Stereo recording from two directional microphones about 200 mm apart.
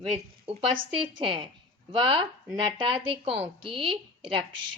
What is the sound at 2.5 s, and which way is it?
A woman's voice, 25° right (ahead or behind).